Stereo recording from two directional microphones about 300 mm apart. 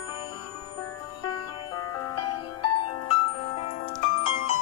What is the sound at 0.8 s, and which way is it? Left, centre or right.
Music, centre.